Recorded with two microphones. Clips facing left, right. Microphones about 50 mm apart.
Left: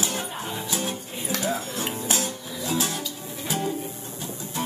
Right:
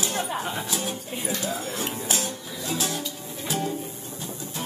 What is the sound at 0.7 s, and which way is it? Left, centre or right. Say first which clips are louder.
Speech: even; centre.